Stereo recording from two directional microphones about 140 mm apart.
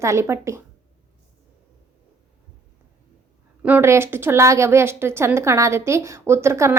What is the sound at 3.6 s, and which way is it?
A woman's voice, 15° right (ahead or behind).